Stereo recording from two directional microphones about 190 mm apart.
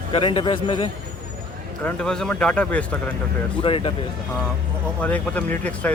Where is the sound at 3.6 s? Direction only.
25° left (ahead or behind).